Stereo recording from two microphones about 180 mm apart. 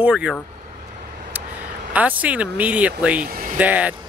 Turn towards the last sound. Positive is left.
turn(degrees=-10)  # may be behind; listen again after turning